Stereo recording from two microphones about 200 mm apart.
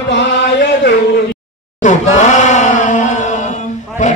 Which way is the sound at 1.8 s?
40° left (ahead or behind).